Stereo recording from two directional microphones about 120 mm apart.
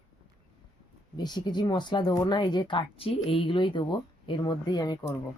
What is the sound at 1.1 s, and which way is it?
Speech, 35° left (ahead or behind).